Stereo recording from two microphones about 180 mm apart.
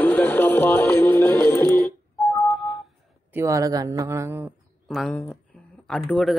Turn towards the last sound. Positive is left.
turn(degrees=5)  # may be behind; listen again after turning